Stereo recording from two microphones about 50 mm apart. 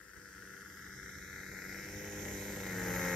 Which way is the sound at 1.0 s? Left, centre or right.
Centre.